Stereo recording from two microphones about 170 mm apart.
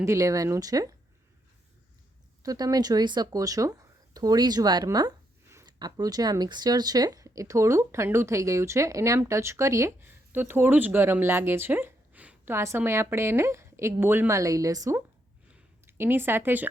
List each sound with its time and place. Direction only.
0.0 s speech: 20° right (ahead or behind)
2.4 s speech: 20° right (ahead or behind)
15.5 s a sound: 15° right (ahead or behind)